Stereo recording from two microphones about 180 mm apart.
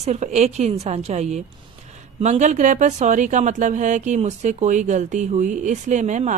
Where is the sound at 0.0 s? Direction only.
40° right (ahead or behind).